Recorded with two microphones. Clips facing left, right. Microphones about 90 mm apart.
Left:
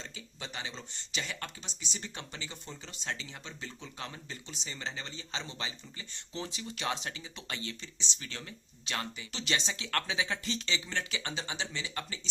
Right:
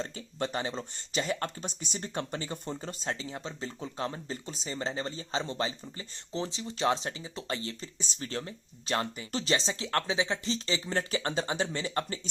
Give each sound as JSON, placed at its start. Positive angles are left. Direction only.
{"t": 0.0, "sound": "speech", "side_deg": -50}
{"t": 3.1, "sound": "speech", "side_deg": -35}